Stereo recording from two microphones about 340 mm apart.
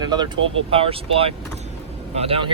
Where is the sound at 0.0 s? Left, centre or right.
Centre.